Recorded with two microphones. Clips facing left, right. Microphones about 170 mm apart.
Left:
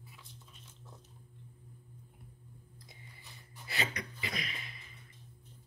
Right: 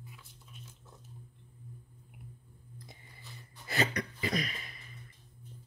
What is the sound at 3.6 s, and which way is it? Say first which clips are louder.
Speech: right 6 dB; 45° right (ahead or behind).